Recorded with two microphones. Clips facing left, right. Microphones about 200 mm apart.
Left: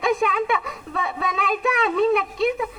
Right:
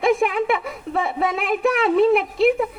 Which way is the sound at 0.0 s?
25° right (ahead or behind).